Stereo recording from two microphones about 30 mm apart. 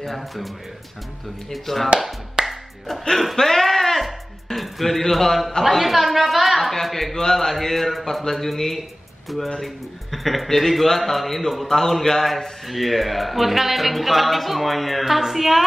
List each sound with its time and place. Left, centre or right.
0.0 s speech: centre
1.5 s speech: centre
2.4 s music: right
3.1 s speech: centre
3.3 s music: centre
5.1 s a man's voice: centre
7.2 s mantra: centre
10.1 s speech: centre
11.7 s mantra: centre
12.2 s speech: centre